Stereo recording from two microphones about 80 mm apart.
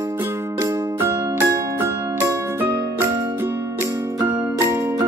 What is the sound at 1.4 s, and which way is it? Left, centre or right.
Music, right.